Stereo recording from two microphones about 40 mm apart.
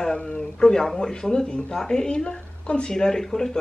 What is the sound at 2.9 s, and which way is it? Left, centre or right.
Speech, centre.